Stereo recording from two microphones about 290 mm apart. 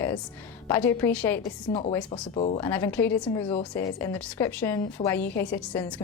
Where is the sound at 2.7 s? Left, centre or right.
Centre.